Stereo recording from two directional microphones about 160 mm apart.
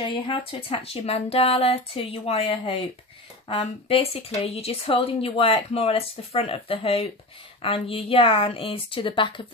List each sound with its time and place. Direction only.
0.0 s speech: 35° left (ahead or behind)